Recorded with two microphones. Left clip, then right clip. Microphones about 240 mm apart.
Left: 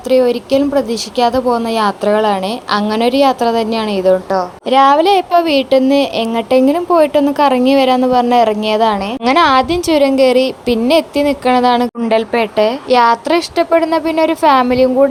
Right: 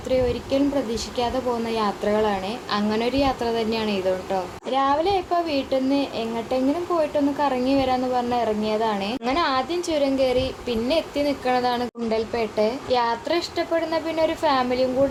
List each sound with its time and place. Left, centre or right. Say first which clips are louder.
0.1 s a woman's voice: left 11 dB; left